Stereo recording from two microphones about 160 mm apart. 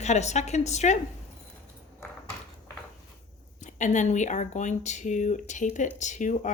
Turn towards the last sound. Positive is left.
turn(degrees=50)  # may be behind; listen again after turning